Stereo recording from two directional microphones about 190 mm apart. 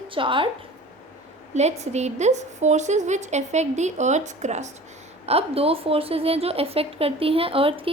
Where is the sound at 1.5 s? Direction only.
35° right (ahead or behind).